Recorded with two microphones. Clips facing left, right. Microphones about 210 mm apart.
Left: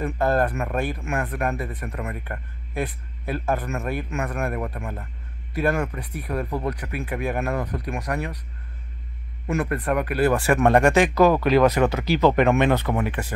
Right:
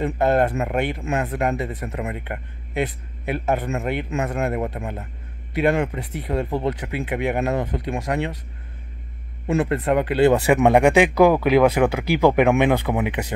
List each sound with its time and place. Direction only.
0.0 s speech: 20° right (ahead or behind)
9.5 s speech: 25° right (ahead or behind)